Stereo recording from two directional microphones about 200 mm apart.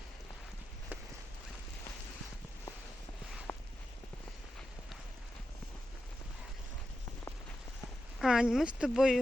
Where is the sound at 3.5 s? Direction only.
10° left (ahead or behind).